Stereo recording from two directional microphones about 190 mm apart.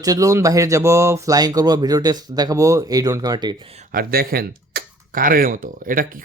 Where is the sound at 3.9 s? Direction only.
50° right (ahead or behind).